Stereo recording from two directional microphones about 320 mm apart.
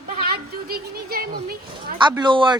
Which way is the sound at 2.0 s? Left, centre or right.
Centre.